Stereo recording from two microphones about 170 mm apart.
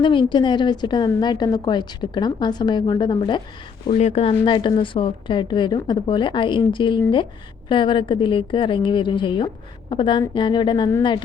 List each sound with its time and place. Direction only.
0.0 s a woman's voice: 30° left (ahead or behind)
3.9 s a woman's voice: 40° left (ahead or behind)